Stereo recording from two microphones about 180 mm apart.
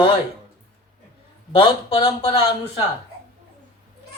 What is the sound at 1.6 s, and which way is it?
Speech, 30° left (ahead or behind).